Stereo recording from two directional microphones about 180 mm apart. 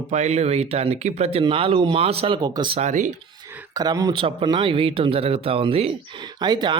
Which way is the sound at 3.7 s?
20° right (ahead or behind).